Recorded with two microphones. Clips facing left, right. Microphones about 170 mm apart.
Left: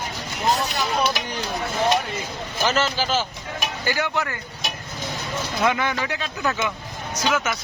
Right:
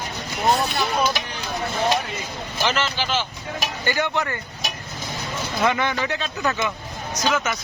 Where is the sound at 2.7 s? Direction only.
40° left (ahead or behind).